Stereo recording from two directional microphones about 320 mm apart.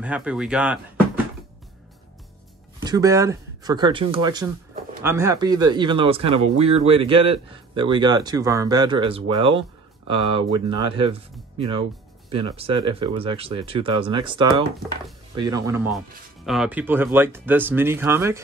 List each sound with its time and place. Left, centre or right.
0.0 s speech: centre
2.8 s speech: centre